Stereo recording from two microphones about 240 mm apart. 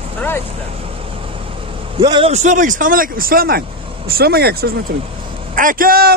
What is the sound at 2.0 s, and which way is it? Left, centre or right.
Speech, right.